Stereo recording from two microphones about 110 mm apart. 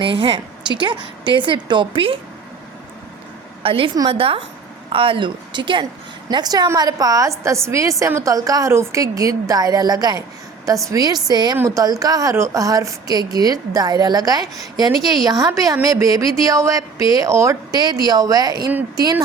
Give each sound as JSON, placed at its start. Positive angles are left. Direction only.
{"t": 0.0, "sound": "a woman's voice", "side_deg": -50}
{"t": 3.6, "sound": "a woman's voice", "side_deg": -55}
{"t": 6.2, "sound": "a woman's voice", "side_deg": -35}
{"t": 11.5, "sound": "speech", "side_deg": -20}
{"t": 11.8, "sound": "a woman's voice", "side_deg": -35}